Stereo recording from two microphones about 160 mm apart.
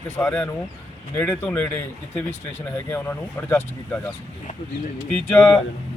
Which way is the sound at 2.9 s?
15° left (ahead or behind).